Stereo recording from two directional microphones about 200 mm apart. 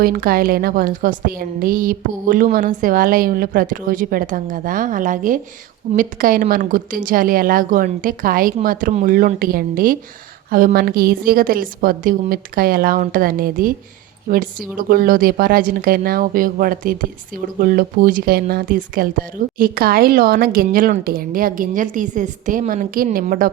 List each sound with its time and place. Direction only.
0.0 s a woman's voice: 45° right (ahead or behind)